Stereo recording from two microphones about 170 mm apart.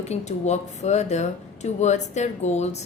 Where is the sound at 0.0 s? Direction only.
40° left (ahead or behind).